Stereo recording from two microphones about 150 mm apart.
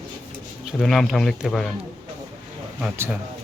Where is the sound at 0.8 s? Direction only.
Centre (ahead or behind).